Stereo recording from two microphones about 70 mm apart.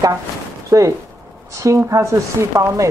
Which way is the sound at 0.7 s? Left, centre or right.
Right.